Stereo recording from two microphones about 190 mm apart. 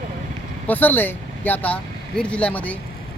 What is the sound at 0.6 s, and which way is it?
Speech, 10° left (ahead or behind).